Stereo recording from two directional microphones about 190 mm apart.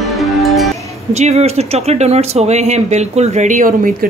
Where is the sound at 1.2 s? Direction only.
35° right (ahead or behind).